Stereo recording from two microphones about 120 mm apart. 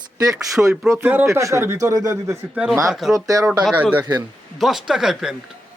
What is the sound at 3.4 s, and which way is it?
Speech, 10° right (ahead or behind).